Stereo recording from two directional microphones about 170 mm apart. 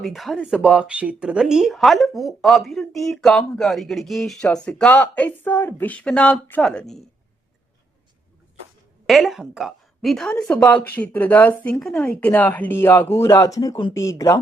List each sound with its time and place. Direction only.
0.0 s speech: centre (ahead or behind)
9.0 s a woman's voice: centre (ahead or behind); by 14.3 s 20° left (ahead or behind)